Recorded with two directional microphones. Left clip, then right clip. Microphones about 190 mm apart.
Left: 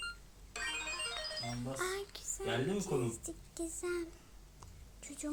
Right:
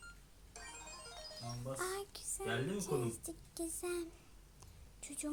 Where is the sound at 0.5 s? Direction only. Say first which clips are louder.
Left 13 dB; 45° left (ahead or behind).